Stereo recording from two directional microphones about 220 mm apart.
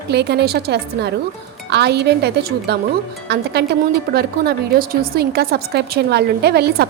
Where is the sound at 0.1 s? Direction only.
50° right (ahead or behind).